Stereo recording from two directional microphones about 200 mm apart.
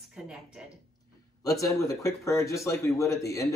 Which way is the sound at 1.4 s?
15° left (ahead or behind).